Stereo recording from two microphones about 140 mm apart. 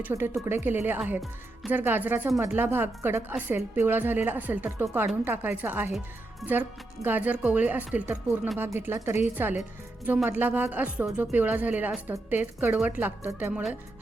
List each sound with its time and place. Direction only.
0.0 s a woman's voice: 15° right (ahead or behind)
13.5 s speech: 5° right (ahead or behind)